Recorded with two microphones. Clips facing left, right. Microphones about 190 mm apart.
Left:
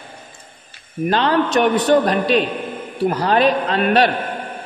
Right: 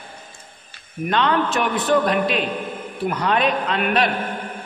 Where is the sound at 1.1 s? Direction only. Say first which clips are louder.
Left 3 dB; 35° left (ahead or behind).